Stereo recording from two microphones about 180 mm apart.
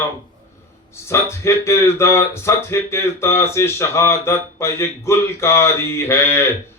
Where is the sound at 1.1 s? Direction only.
15° left (ahead or behind).